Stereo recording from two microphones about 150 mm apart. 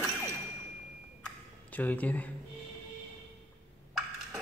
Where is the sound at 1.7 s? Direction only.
10° left (ahead or behind).